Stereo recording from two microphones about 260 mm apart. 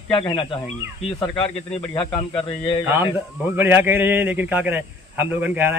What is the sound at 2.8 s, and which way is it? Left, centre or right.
A man's voice, centre.